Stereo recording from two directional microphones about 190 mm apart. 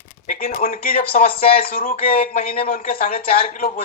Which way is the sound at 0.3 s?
45° left (ahead or behind).